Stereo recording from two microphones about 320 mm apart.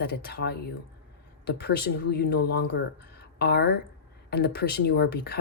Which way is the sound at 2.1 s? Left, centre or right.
Left.